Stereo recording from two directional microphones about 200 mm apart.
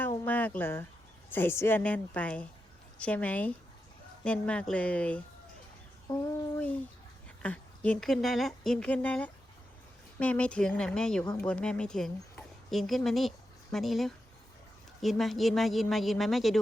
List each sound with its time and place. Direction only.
0.3 s a woman's voice: 10° left (ahead or behind)
6.1 s a child's voice: 20° left (ahead or behind)
6.6 s speech: 5° left (ahead or behind)